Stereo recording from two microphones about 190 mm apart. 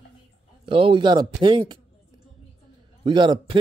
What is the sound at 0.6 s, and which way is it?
Speech, 30° right (ahead or behind).